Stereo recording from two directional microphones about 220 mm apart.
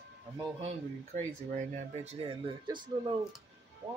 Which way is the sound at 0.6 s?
35° right (ahead or behind).